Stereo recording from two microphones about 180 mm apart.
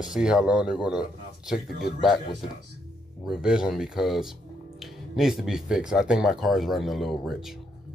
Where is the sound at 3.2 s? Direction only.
5° right (ahead or behind).